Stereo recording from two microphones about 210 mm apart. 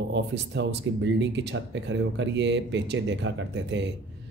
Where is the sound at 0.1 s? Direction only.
55° right (ahead or behind).